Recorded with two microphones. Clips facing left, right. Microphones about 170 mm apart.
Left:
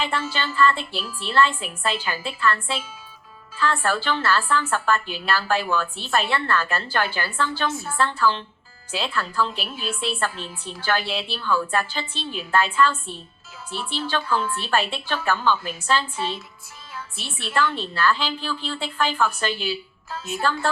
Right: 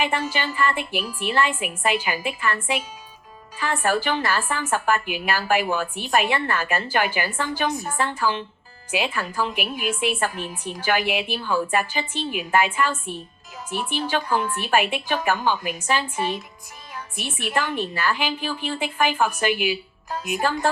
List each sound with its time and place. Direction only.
0.0 s a woman's voice: 15° right (ahead or behind)